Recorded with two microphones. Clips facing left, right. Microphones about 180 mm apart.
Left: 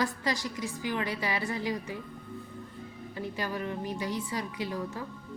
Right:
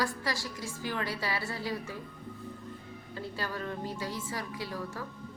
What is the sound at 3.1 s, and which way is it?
A woman's voice, 15° left (ahead or behind).